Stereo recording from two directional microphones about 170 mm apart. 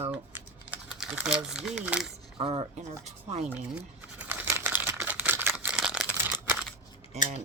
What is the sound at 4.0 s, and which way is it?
Crumpling, 10° right (ahead or behind).